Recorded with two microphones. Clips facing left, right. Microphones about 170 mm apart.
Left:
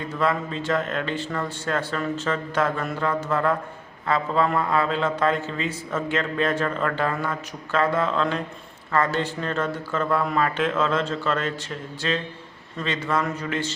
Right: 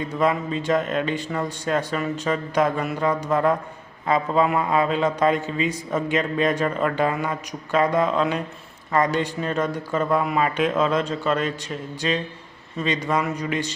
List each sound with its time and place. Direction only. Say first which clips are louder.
0.1 s a man's voice: right 2 dB; 15° right (ahead or behind)